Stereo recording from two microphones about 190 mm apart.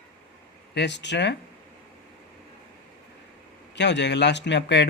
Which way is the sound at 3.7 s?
65° left (ahead or behind).